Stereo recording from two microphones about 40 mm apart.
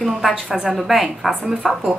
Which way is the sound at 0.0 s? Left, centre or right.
Centre.